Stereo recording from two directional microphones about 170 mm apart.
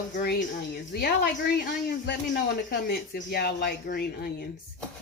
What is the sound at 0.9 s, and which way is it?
A woman's voice, 70° left (ahead or behind).